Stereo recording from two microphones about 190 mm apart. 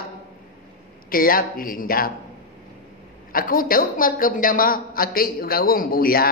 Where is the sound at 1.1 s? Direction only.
50° left (ahead or behind).